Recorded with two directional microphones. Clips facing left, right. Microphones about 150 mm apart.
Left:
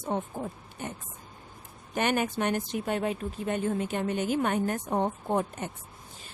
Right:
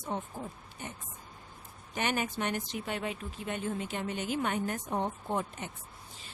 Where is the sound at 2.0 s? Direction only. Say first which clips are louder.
Left 5 dB; 50° left (ahead or behind).